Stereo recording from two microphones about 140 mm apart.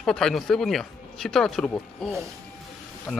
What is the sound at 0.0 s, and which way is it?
A man's voice, 5° left (ahead or behind).